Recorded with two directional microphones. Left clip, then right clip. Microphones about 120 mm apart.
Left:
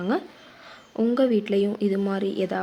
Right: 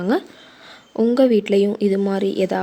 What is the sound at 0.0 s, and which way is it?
Speech, 50° right (ahead or behind).